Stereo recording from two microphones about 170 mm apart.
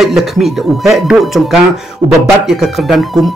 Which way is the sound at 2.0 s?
30° right (ahead or behind).